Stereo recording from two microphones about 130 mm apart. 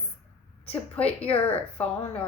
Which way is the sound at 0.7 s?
10° left (ahead or behind).